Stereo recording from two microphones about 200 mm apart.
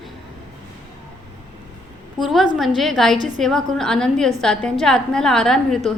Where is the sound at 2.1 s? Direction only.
Centre (ahead or behind).